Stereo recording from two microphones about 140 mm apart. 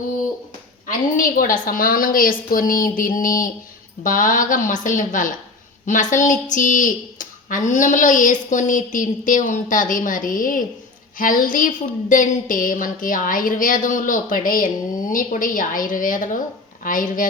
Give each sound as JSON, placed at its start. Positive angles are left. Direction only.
{"t": 0.9, "sound": "a woman's voice", "side_deg": 80}